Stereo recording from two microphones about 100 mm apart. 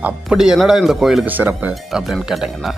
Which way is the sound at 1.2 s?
20° right (ahead or behind).